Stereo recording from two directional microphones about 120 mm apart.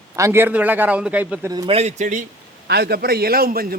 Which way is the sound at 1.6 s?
60° right (ahead or behind).